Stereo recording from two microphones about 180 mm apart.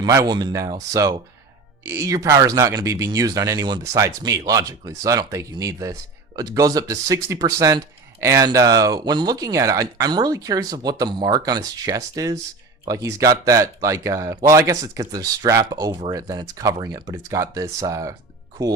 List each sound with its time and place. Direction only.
0.0 s speech: 20° right (ahead or behind)